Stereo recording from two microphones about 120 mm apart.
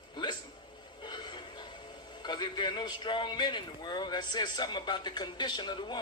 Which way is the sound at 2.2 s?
40° left (ahead or behind).